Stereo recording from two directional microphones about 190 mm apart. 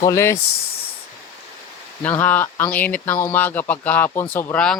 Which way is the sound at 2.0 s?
10° left (ahead or behind).